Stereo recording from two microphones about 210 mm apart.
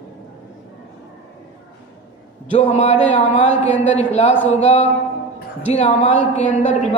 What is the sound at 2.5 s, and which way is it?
Mantra, 30° left (ahead or behind).